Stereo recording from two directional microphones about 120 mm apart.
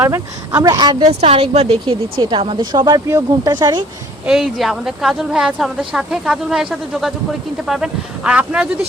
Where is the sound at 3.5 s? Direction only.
35° right (ahead or behind).